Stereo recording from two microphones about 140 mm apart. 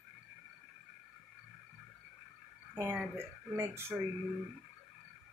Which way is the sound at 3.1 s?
15° right (ahead or behind).